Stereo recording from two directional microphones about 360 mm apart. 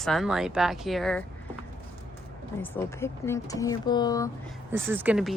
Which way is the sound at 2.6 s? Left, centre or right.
Centre.